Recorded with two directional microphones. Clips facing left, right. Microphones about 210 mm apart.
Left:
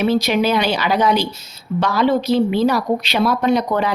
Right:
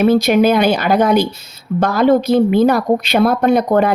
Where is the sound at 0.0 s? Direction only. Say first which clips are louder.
Right 5 dB; 50° right (ahead or behind).